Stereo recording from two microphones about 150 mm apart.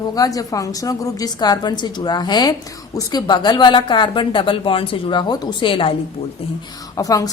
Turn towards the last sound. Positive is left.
turn(degrees=25)  # may be behind; listen again after turning